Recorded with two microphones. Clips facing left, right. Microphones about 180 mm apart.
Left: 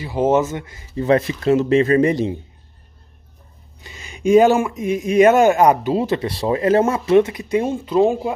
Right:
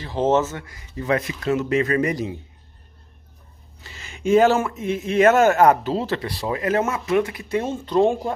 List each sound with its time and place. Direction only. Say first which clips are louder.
0.0 s speech: left 3 dB; 10° left (ahead or behind); by 2.3 s 30° left (ahead or behind)
3.8 s speech: left 5 dB; 15° left (ahead or behind)